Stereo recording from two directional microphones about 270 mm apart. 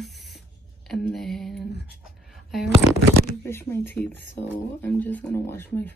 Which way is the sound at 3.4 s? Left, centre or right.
Centre.